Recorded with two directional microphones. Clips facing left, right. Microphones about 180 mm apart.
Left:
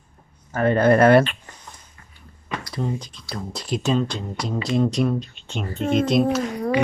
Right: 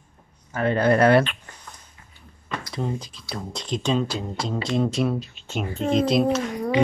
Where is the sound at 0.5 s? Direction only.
50° left (ahead or behind).